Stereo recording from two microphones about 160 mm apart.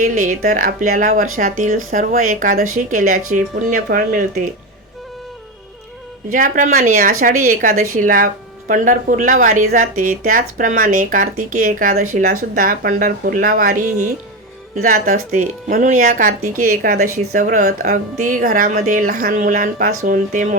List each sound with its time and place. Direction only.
0.0 s speech: 55° right (ahead or behind)
6.3 s speech: 55° right (ahead or behind)
17.7 s speech: 65° right (ahead or behind)